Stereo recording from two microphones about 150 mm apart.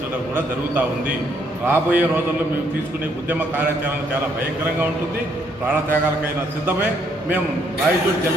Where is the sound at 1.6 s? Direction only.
15° right (ahead or behind).